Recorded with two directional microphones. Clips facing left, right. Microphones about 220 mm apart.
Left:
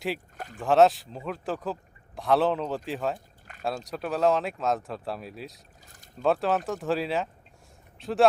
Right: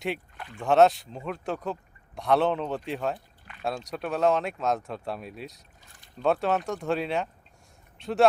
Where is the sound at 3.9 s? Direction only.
Centre (ahead or behind).